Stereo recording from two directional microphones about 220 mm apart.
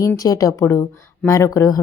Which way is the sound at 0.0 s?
15° left (ahead or behind).